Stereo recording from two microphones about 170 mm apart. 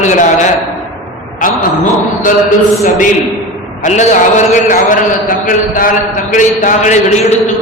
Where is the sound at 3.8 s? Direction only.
45° left (ahead or behind).